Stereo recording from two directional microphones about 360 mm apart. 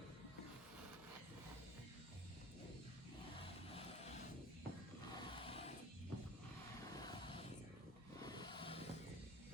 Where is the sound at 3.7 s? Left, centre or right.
Centre.